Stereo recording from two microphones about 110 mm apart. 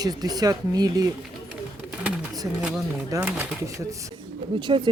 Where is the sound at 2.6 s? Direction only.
10° right (ahead or behind).